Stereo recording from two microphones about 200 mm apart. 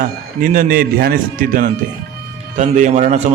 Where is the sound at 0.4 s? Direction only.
45° right (ahead or behind).